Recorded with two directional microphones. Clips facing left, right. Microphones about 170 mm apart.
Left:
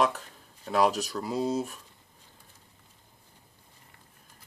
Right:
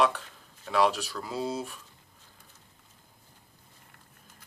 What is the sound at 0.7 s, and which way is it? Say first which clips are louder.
Speech: left 1 dB; 40° left (ahead or behind).